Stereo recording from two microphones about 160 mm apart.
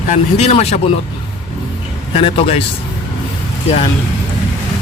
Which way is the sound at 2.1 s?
35° left (ahead or behind).